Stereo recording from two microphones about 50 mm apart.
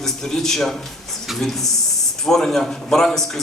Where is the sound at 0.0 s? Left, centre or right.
Centre.